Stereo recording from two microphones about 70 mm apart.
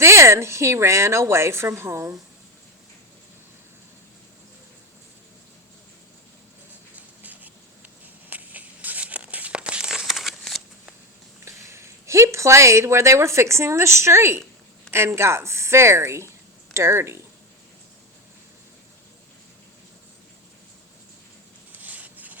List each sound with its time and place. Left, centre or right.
0.0 s a woman's voice: right
7.3 s a sound: right
8.3 s crumpling: right; by 10.6 s centre
11.4 s a woman's voice: right
21.7 s rub: right